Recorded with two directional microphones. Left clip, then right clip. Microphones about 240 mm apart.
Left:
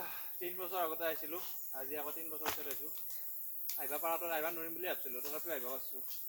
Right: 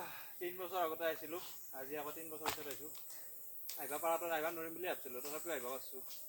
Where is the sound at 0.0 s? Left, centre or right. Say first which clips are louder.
Even; centre.